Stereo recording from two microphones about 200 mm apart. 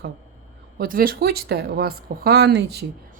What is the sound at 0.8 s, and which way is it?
Speech, 45° right (ahead or behind).